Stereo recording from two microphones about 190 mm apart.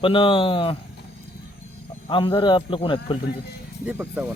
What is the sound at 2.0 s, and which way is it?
Speech, 25° left (ahead or behind).